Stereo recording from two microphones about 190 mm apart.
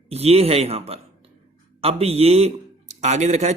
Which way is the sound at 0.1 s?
35° right (ahead or behind).